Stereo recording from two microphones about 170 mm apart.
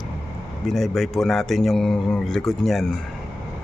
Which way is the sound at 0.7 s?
Centre (ahead or behind).